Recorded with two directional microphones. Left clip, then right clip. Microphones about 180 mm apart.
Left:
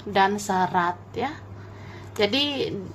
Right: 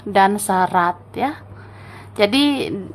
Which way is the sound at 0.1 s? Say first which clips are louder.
Right 6 dB; 20° right (ahead or behind).